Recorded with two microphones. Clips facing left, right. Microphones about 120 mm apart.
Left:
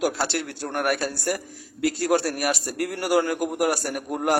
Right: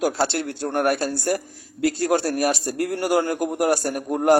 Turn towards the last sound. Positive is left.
turn(degrees=-25)  # may be behind; listen again after turning